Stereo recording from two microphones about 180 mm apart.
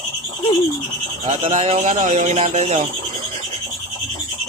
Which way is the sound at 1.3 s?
40° right (ahead or behind).